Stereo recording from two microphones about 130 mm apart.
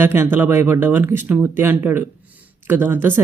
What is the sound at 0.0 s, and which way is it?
Speech, 20° right (ahead or behind).